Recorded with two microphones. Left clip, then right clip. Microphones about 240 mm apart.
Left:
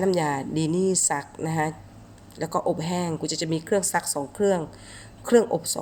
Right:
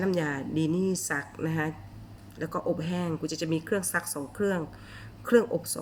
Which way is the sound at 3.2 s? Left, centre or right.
Centre.